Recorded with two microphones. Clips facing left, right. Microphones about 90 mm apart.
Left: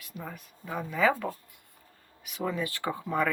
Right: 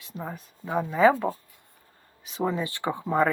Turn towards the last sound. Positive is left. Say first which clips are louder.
# right 5 dB
turn(degrees=-30)  # may be behind; listen again after turning